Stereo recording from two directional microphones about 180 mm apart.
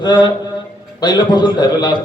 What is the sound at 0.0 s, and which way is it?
A man's voice, 25° left (ahead or behind).